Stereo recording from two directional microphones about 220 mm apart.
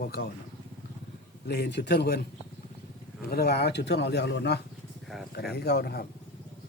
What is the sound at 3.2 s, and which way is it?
Speech, 45° left (ahead or behind).